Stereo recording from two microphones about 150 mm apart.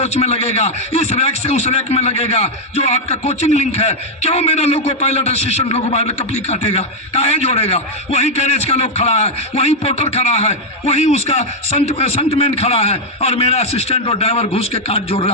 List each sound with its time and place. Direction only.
0.0 s a man's voice: 45° left (ahead or behind)